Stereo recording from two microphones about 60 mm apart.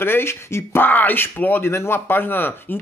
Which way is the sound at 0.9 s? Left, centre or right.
Left.